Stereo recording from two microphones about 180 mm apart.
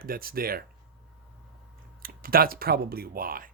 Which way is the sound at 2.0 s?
55° right (ahead or behind).